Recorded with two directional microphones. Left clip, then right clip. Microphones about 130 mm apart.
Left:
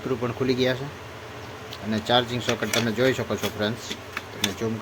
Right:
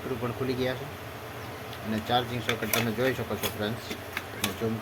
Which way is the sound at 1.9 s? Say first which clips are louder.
Left 5 dB; 55° left (ahead or behind).